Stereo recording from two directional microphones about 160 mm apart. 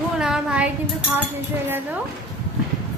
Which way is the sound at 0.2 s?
5° right (ahead or behind).